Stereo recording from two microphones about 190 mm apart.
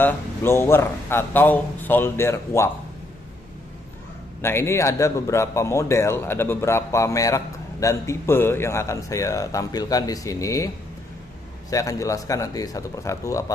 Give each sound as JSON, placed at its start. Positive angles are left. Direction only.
{"t": 0.0, "sound": "speech", "side_deg": 10}
{"t": 4.4, "sound": "speech", "side_deg": 15}
{"t": 11.7, "sound": "speech", "side_deg": 15}